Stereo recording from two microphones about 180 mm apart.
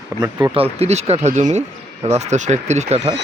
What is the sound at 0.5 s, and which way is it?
Speech, 35° right (ahead or behind).